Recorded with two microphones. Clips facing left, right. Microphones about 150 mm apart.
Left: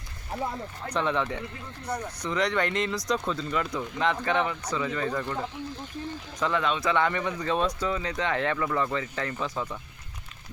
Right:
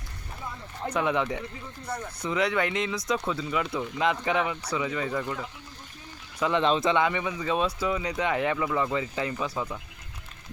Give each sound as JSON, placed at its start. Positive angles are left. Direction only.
{"t": 0.9, "sound": "speech", "side_deg": -15}
{"t": 1.9, "sound": "speech", "side_deg": 15}
{"t": 2.2, "sound": "speech", "side_deg": -5}
{"t": 6.6, "sound": "speech", "side_deg": -25}
{"t": 7.0, "sound": "speech", "side_deg": -5}